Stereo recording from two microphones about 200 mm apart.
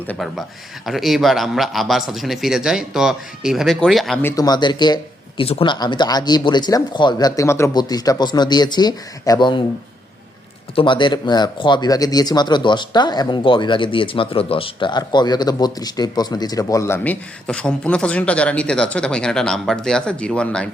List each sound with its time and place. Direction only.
0.1 s a man's voice: centre (ahead or behind)
4.2 s speech: 15° left (ahead or behind)
10.8 s speech: 25° left (ahead or behind); by 20.7 s 5° left (ahead or behind)